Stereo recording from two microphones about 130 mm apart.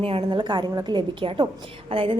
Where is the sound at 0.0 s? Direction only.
45° right (ahead or behind).